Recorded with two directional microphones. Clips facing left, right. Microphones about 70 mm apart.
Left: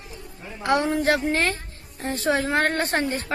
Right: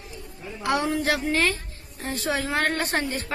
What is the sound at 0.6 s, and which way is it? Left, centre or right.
A woman's voice, left.